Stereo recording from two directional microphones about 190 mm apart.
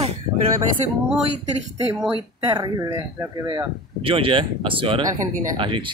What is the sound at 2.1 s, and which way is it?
Speech, 20° right (ahead or behind).